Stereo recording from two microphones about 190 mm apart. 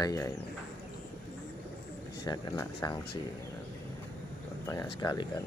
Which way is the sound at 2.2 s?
20° left (ahead or behind).